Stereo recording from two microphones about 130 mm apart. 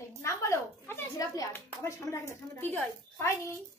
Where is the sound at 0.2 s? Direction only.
20° left (ahead or behind).